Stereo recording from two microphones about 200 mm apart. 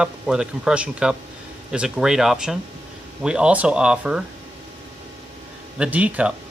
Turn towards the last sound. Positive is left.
turn(degrees=-5)  # may be behind; listen again after turning